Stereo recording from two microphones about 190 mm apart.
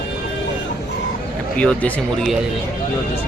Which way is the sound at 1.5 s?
5° left (ahead or behind).